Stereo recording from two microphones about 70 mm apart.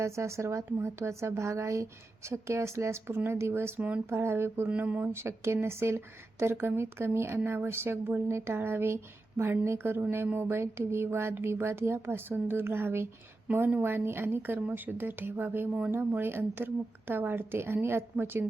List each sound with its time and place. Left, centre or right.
0.0 s a woman's voice: right
3.8 s speech: right
4.1 s a woman's voice: right
4.8 s speech: right
5.1 s a woman's voice: right
13.5 s speech: right
13.8 s a woman's voice: right